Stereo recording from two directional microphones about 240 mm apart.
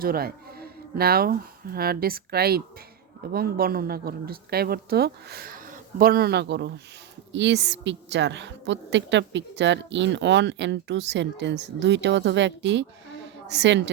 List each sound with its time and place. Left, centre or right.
0.0 s a woman's voice: right